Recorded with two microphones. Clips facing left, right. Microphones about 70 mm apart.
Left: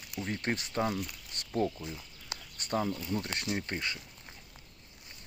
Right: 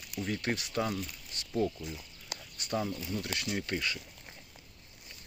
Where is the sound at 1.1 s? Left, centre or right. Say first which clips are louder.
Even; left.